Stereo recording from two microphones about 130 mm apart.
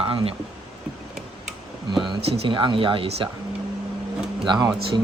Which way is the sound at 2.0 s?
45° right (ahead or behind).